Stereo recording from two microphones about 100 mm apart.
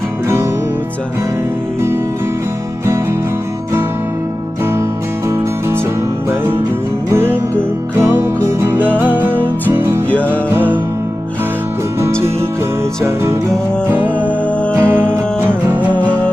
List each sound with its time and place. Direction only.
2.8 s music: 30° right (ahead or behind)
4.6 s music: 25° right (ahead or behind)
7.9 s music: 20° right (ahead or behind)
10.1 s music: 15° left (ahead or behind)
10.3 s music: 20° right (ahead or behind)
13.1 s music: 25° right (ahead or behind)
14.2 s music: 15° left (ahead or behind)
14.8 s music: 20° right (ahead or behind)